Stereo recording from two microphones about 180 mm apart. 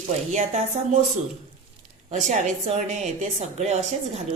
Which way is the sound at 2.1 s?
40° right (ahead or behind).